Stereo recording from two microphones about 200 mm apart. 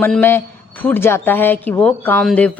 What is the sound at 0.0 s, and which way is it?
A man's voice, 10° left (ahead or behind).